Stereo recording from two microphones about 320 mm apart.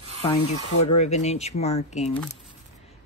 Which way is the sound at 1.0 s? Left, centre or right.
Left.